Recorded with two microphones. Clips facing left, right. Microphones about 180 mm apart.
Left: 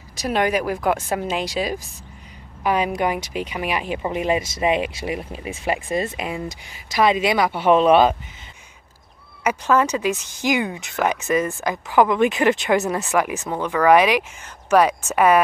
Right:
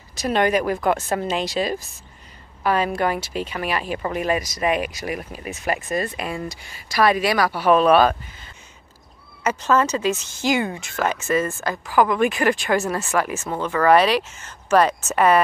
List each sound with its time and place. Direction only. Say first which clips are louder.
0.1 s speech: right 1 dB; 10° left (ahead or behind)
9.4 s speech: left 1 dB; 10° left (ahead or behind)